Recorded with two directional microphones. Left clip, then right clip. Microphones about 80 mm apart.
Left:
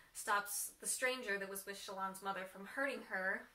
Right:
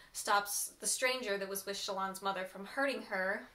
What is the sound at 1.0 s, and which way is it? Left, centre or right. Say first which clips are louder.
Speech: right 4 dB; centre.